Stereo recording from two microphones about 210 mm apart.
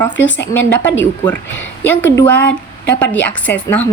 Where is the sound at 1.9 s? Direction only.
10° left (ahead or behind).